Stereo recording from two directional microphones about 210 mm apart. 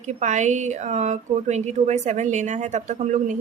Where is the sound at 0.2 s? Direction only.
35° right (ahead or behind).